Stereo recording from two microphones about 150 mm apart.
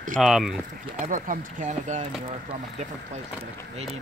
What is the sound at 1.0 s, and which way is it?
Speech, 55° right (ahead or behind).